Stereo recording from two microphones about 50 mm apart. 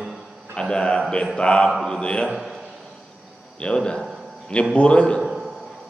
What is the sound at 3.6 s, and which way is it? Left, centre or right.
A man's voice, centre.